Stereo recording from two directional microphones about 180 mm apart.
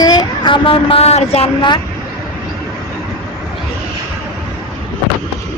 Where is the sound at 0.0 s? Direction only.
20° left (ahead or behind).